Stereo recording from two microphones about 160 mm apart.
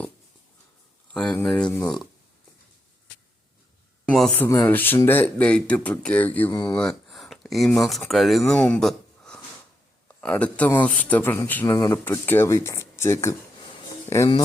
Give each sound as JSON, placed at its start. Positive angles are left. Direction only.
{"t": 1.1, "sound": "a man's voice", "side_deg": 5}
{"t": 4.1, "sound": "speech", "side_deg": 0}
{"t": 4.4, "sound": "a man's voice", "side_deg": 10}
{"t": 6.5, "sound": "speech", "side_deg": 25}
{"t": 6.7, "sound": "a man's voice", "side_deg": 0}